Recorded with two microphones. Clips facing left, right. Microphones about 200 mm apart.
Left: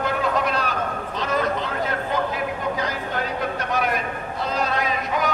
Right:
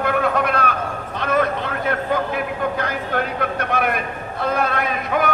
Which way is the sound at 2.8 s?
55° right (ahead or behind).